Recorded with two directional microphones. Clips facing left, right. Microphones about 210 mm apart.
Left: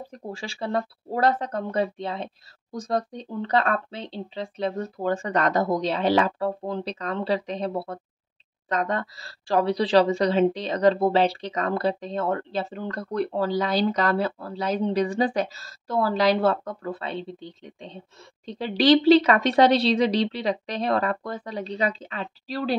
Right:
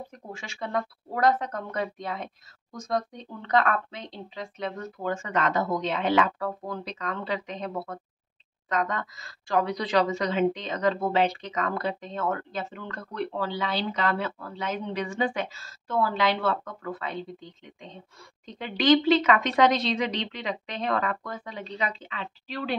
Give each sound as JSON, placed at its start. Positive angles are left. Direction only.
{"t": 0.1, "sound": "a woman's voice", "side_deg": 35}